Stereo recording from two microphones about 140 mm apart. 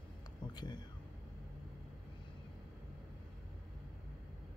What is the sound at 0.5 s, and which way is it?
Speech, 30° left (ahead or behind).